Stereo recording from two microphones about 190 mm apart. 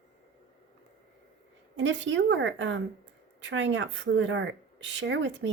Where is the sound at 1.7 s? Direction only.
75° right (ahead or behind).